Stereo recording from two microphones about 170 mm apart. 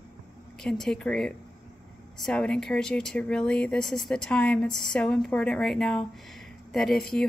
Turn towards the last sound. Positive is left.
turn(degrees=0)  # may be behind; listen again after turning